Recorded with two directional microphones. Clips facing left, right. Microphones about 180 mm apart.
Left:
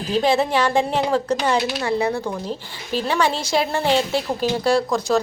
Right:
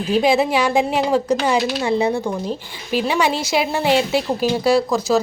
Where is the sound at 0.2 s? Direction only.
10° right (ahead or behind).